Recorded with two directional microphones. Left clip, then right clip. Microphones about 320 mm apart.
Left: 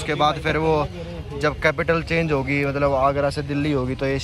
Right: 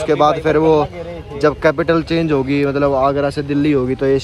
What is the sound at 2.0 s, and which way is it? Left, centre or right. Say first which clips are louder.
Speech: right 5 dB; centre.